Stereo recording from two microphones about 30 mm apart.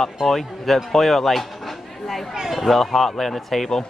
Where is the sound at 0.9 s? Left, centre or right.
Centre.